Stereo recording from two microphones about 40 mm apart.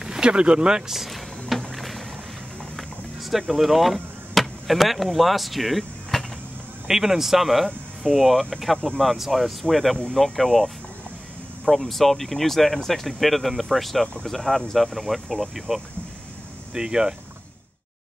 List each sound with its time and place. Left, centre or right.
0.0 s speech: right
0.9 s speech: centre
1.6 s boat: centre
2.7 s a sound: centre
6.9 s speech: centre
16.7 s speech: centre